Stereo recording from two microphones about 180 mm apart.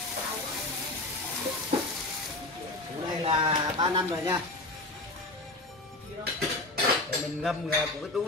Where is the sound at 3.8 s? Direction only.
25° right (ahead or behind).